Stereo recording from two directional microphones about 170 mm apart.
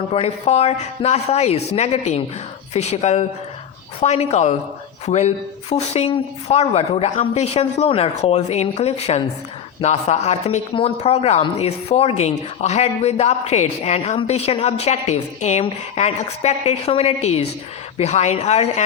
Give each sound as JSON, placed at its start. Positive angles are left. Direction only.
{"t": 0.1, "sound": "speech", "side_deg": 40}